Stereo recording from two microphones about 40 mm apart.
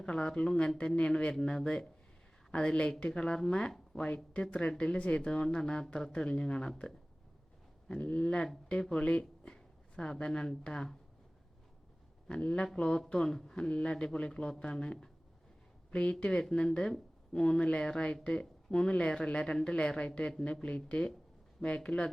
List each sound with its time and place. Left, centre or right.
0.0 s speech: left
1.3 s speech: centre
8.0 s speech: left
12.3 s speech: left
13.6 s speech: left
16.4 s speech: centre
17.3 s speech: left